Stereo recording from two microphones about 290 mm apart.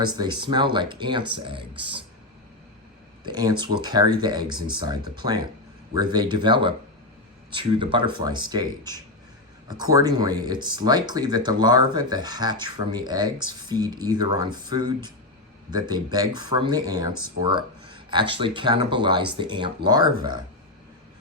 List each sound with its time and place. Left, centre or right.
0.0 s speech: centre
3.2 s speech: centre